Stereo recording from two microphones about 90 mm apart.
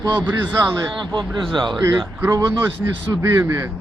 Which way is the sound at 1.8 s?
35° right (ahead or behind).